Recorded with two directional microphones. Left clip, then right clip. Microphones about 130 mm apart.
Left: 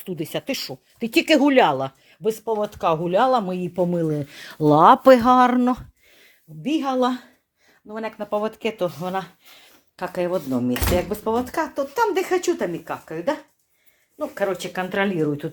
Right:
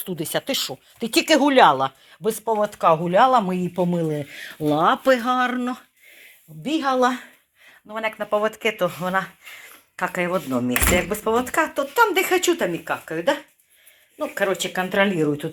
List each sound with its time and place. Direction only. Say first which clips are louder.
0.0 s speech: right 2 dB; 25° left (ahead or behind)
0.9 s speech: even; 35° left (ahead or behind)
3.4 s speech: right 1 dB; 10° right (ahead or behind)
3.9 s speech: left 1 dB; 50° left (ahead or behind); by 5.8 s 65° left (ahead or behind)
6.7 s speech: right 2 dB; 35° left (ahead or behind)
7.9 s speech: right 4 dB; 5° left (ahead or behind)
8.4 s speech: right 2 dB; 35° left (ahead or behind)
9.9 s speech: right 1 dB; 20° left (ahead or behind)